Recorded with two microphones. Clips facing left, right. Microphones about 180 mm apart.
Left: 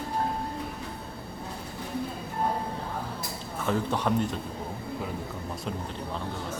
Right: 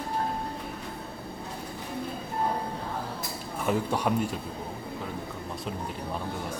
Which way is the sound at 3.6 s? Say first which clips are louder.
Even; 10° right (ahead or behind).